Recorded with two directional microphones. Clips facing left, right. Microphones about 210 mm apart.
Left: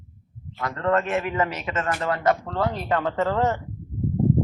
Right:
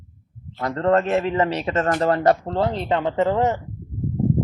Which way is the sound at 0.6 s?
35° right (ahead or behind).